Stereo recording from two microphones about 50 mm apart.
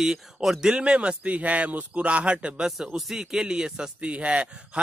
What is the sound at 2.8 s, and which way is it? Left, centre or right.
Speech, centre.